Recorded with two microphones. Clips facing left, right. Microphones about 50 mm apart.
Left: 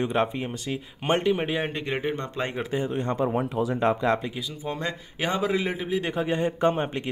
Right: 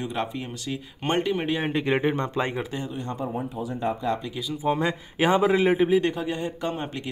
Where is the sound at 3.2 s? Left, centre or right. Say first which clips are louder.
Left 5 dB; left.